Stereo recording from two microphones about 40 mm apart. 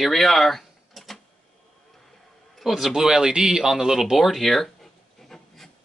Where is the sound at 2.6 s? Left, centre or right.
Centre.